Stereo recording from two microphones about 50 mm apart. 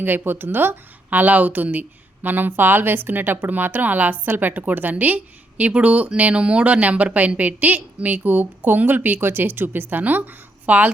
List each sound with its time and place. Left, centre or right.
0.0 s a woman's voice: right